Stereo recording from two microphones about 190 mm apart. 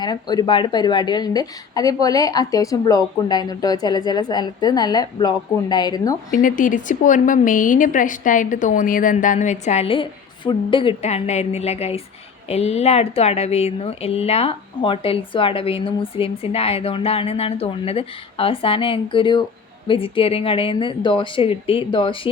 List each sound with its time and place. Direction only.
0.0 s a woman's voice: 20° left (ahead or behind)
6.3 s a woman's voice: 45° left (ahead or behind); by 22.3 s 25° left (ahead or behind)